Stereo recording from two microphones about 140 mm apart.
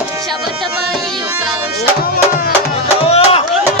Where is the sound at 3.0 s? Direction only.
45° left (ahead or behind).